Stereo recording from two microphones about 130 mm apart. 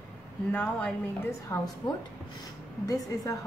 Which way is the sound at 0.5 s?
15° left (ahead or behind).